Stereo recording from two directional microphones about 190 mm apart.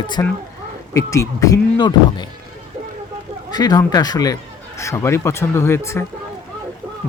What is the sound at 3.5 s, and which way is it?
Speech, 20° left (ahead or behind).